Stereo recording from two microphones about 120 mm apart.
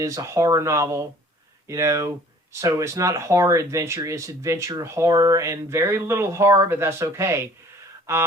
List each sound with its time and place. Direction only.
0.0 s speech: 25° right (ahead or behind)